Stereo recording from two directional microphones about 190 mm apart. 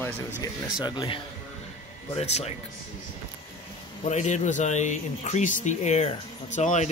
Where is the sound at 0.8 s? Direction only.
25° left (ahead or behind).